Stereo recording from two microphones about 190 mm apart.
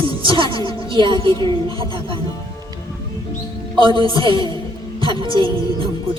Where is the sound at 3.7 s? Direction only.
25° right (ahead or behind).